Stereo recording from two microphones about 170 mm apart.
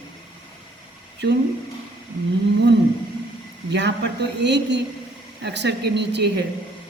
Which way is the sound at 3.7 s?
90° right.